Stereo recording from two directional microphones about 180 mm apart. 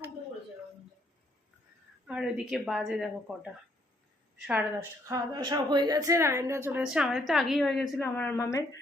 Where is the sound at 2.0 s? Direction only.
5° right (ahead or behind).